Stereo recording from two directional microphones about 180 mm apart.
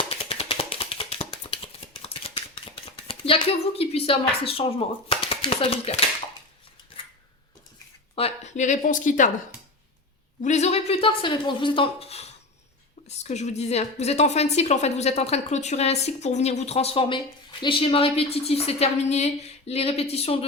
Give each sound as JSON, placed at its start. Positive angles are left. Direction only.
{"t": 0.1, "sound": "a sound", "side_deg": 30}
{"t": 8.1, "sound": "speech", "side_deg": 35}
{"t": 10.4, "sound": "a woman's voice", "side_deg": 40}